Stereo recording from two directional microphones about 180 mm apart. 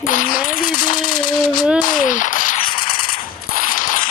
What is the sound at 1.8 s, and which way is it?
Machine gun, 50° left (ahead or behind).